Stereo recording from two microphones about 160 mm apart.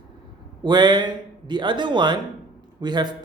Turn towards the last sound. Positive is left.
turn(degrees=-25)  # may be behind; listen again after turning